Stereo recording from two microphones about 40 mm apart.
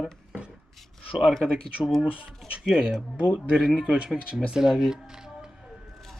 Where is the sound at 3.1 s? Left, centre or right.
Right.